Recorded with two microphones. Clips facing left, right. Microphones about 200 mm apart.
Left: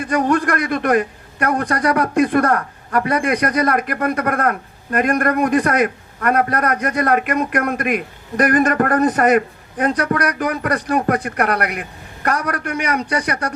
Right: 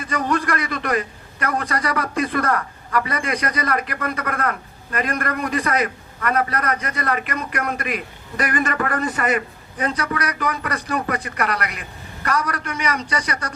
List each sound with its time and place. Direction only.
0.1 s a man's voice: 60° left (ahead or behind)